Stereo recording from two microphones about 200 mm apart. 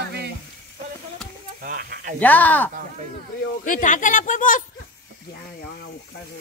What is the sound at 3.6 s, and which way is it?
Speech, 40° left (ahead or behind).